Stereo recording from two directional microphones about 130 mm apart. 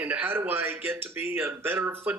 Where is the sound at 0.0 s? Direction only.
15° right (ahead or behind).